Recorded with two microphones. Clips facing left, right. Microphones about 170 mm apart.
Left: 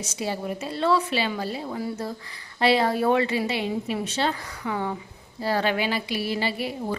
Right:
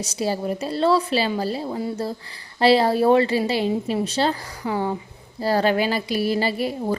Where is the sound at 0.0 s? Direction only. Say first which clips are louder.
Right 5 dB; 35° right (ahead or behind).